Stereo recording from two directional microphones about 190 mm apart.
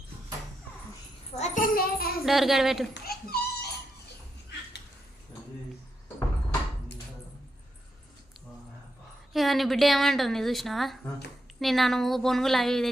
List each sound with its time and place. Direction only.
1.4 s a child's voice: 45° left (ahead or behind)
2.2 s a woman's voice: centre (ahead or behind)
2.9 s babbling: 55° left (ahead or behind)
9.3 s a woman's voice: centre (ahead or behind)